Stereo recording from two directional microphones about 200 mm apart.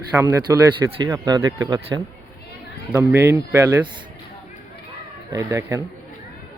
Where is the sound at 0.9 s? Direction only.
25° right (ahead or behind).